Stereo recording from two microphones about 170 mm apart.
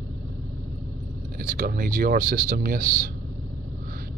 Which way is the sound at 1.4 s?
60° right (ahead or behind).